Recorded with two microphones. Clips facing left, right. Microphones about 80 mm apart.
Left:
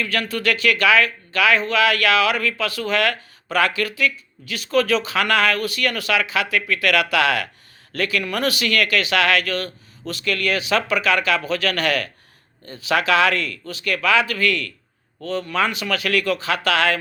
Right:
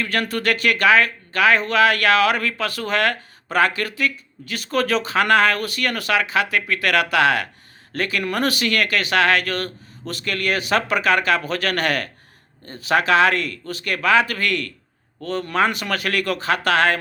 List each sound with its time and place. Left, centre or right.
0.0 s speech: right